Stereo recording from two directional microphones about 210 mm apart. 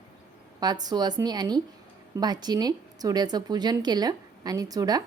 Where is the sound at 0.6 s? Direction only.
20° right (ahead or behind).